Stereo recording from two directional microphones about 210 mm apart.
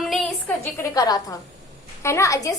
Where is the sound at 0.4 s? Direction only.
10° left (ahead or behind).